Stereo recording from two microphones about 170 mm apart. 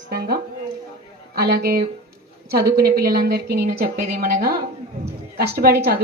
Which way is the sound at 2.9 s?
60° right (ahead or behind).